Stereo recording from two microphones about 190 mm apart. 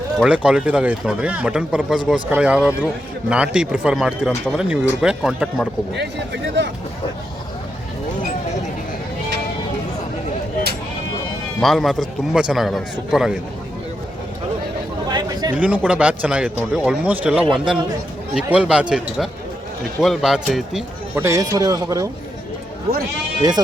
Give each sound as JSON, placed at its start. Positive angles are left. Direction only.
{"t": 0.2, "sound": "a man's voice", "side_deg": -5}
{"t": 5.9, "sound": "speech", "side_deg": -65}
{"t": 11.6, "sound": "a man's voice", "side_deg": 0}
{"t": 15.1, "sound": "chatter", "side_deg": -20}
{"t": 15.5, "sound": "a man's voice", "side_deg": -10}
{"t": 21.2, "sound": "speech", "side_deg": -15}
{"t": 23.4, "sound": "speech", "side_deg": -20}